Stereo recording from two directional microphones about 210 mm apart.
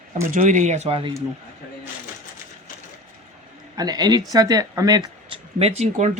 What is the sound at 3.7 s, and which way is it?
Speech, 20° right (ahead or behind).